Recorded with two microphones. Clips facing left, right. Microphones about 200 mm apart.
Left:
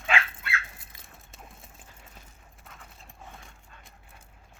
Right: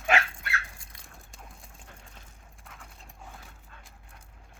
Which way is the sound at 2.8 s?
Centre (ahead or behind).